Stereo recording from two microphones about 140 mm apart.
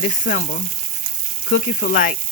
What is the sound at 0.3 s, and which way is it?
Frying, 90° left.